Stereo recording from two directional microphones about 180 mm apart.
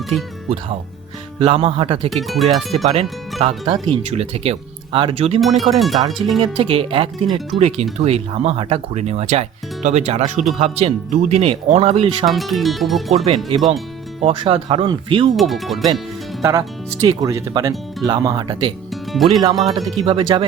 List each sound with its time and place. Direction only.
0.1 s speech: 35° right (ahead or behind)
1.4 s speech: 30° right (ahead or behind)
2.0 s speech: centre (ahead or behind)
2.7 s speech: 35° right (ahead or behind)
5.4 s speech: centre (ahead or behind)
6.4 s speech: 30° right (ahead or behind)
12.2 s speech: centre (ahead or behind)
14.2 s speech: 30° right (ahead or behind)
15.4 s speech: centre (ahead or behind)
16.4 s speech: 15° right (ahead or behind)
19.1 s speech: centre (ahead or behind)
20.1 s speech: 30° right (ahead or behind)